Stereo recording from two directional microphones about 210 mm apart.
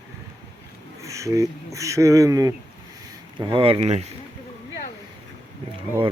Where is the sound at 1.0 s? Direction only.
15° right (ahead or behind).